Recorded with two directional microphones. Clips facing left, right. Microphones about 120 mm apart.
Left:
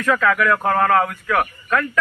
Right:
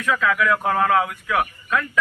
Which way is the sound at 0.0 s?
60° left (ahead or behind).